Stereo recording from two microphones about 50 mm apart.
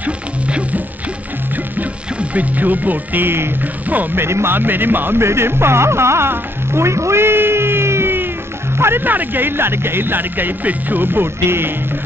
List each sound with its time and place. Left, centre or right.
0.0 s music: right
2.1 s speech: right
3.9 s speech: right
4.2 s speech: right
4.6 s speech: right
5.2 s speech: right
9.0 s speech: right